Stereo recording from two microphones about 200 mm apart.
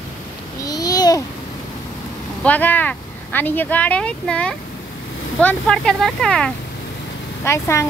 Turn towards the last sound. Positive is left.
turn(degrees=15)  # may be behind; listen again after turning